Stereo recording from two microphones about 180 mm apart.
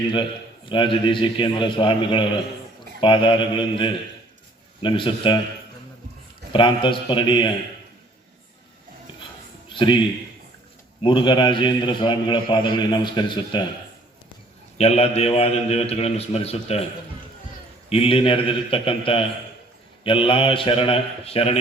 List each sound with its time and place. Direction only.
0.1 s a man's voice: 25° left (ahead or behind)
6.5 s a man's voice: 25° left (ahead or behind)
9.7 s a man's voice: 25° left (ahead or behind)
11.0 s a man's voice: 25° left (ahead or behind)
14.8 s a man's voice: 35° left (ahead or behind)
17.8 s a man's voice: 30° left (ahead or behind)